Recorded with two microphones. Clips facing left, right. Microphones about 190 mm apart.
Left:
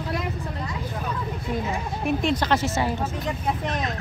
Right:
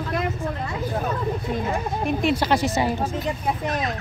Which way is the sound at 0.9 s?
45° right (ahead or behind).